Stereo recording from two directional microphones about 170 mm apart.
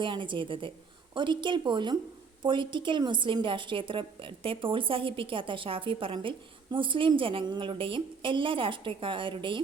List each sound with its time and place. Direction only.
0.0 s a woman's voice: 30° right (ahead or behind)